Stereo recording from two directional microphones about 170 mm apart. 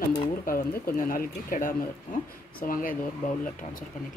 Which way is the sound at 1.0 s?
55° left (ahead or behind).